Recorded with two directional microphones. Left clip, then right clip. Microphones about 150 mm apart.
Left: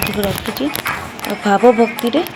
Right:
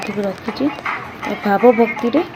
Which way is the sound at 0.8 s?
65° left (ahead or behind).